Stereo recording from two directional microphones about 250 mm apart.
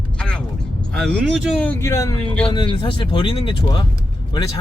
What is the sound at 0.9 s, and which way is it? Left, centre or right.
Speech, centre.